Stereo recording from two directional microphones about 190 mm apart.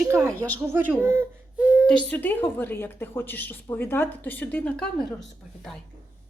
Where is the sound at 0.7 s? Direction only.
10° right (ahead or behind).